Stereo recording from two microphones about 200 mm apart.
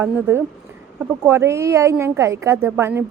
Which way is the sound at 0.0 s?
10° right (ahead or behind).